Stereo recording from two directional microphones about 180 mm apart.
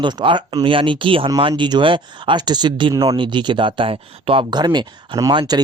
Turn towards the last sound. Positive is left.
turn(degrees=-25)  # may be behind; listen again after turning